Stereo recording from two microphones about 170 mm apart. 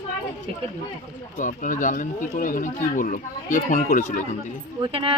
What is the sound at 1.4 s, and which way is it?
Speech, 50° left (ahead or behind).